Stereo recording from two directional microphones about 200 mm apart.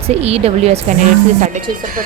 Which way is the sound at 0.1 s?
30° right (ahead or behind).